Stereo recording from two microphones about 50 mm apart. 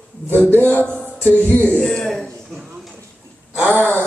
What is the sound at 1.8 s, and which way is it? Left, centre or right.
Speech, centre.